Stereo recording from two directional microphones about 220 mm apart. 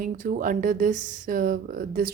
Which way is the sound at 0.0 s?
35° right (ahead or behind).